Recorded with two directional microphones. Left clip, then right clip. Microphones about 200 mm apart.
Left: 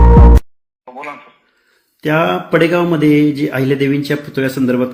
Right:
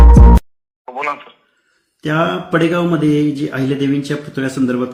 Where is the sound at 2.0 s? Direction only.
20° left (ahead or behind).